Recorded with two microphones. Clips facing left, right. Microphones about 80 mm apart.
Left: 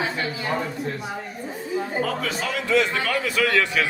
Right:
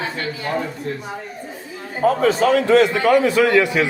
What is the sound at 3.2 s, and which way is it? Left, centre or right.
Speech, right.